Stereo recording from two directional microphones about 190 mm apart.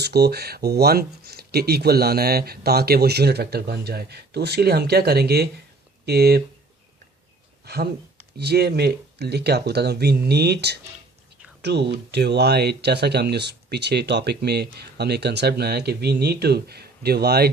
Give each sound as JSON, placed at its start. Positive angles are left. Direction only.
{"t": 0.0, "sound": "speech", "side_deg": -60}
{"t": 7.6, "sound": "speech", "side_deg": -55}